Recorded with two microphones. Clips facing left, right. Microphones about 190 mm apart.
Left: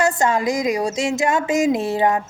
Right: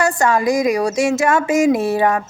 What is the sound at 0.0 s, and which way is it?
A woman's voice, 20° left (ahead or behind).